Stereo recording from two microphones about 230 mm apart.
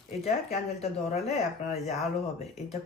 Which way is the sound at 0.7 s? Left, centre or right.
Left.